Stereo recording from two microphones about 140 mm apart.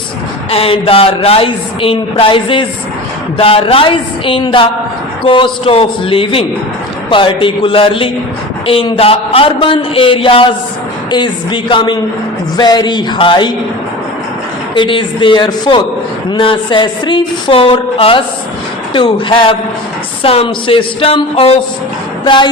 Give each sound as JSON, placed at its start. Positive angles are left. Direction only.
{"t": 0.5, "sound": "a woman's voice", "side_deg": 40}
{"t": 14.8, "sound": "a woman's voice", "side_deg": 35}